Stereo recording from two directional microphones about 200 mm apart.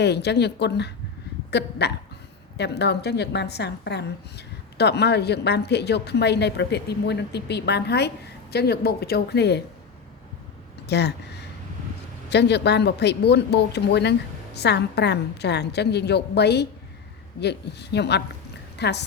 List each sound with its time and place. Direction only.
0.0 s a woman's voice: 55° left (ahead or behind)
1.5 s hiccup: 55° left (ahead or behind)
2.6 s a woman's voice: 55° left (ahead or behind)
10.8 s speech: 55° left (ahead or behind)
12.3 s a woman's voice: 55° left (ahead or behind)